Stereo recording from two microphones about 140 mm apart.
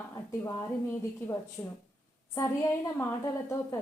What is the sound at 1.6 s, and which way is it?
Speech, 20° left (ahead or behind).